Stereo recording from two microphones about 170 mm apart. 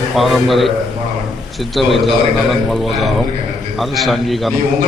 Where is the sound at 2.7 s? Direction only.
Centre (ahead or behind).